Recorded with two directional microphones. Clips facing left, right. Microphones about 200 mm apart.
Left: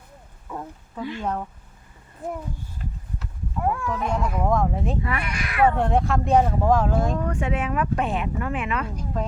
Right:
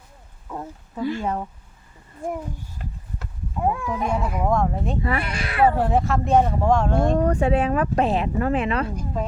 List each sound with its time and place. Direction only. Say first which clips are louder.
0.4 s a sound: right 1 dB; 5° right (ahead or behind)
1.2 s speech: right 1 dB; 10° right (ahead or behind)
2.8 s a sound: even; 60° right (ahead or behind)
3.6 s speech: right 2 dB; 20° right (ahead or behind); by 4.9 s centre (ahead or behind)
5.0 s speech: right 3 dB; 30° right (ahead or behind)
5.6 s speech: right 1 dB; 5° right (ahead or behind)
7.2 s speech: right 6 dB; 35° right (ahead or behind)